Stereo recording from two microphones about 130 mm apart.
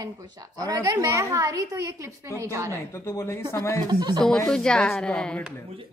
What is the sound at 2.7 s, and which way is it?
Speech, 20° left (ahead or behind).